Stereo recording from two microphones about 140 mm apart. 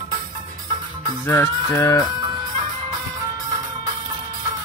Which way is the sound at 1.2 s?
20° left (ahead or behind).